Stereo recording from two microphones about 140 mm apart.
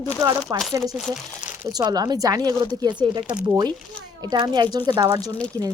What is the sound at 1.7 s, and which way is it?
Speech, 30° right (ahead or behind).